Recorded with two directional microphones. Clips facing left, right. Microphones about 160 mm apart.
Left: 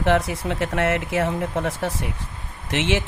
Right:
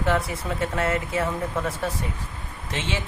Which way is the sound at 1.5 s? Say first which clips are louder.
Left 2 dB; 70° left (ahead or behind).